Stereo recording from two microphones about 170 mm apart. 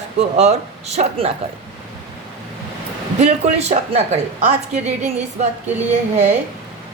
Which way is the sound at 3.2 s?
40° right (ahead or behind).